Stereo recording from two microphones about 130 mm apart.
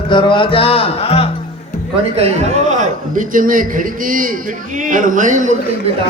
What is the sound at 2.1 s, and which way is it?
A man's voice, 60° right (ahead or behind).